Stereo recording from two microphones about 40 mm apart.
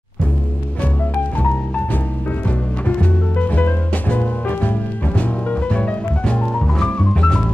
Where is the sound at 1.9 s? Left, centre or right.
Left.